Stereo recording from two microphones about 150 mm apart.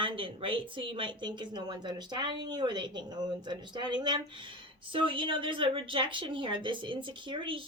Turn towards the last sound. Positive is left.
turn(degrees=-35)  # may be behind; listen again after turning